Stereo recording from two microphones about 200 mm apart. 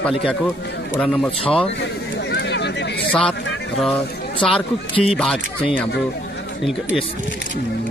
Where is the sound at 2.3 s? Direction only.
60° left (ahead or behind).